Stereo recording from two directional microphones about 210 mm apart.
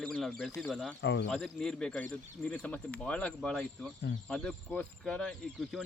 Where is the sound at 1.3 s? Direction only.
5° left (ahead or behind).